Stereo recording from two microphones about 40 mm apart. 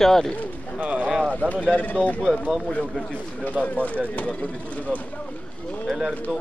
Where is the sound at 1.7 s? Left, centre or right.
Left.